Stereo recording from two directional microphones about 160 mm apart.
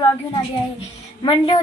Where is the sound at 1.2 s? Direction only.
30° left (ahead or behind).